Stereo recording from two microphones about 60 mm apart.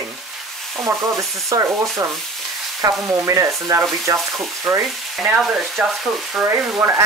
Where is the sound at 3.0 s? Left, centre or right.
Right.